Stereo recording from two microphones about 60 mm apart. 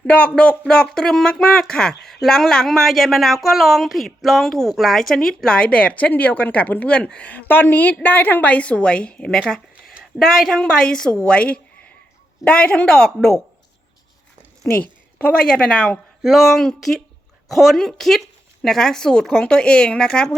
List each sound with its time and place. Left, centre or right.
0.1 s a woman's voice: left
10.0 s a woman's voice: centre
14.6 s a woman's voice: left